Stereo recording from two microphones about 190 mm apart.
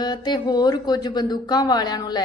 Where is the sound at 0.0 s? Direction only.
20° left (ahead or behind).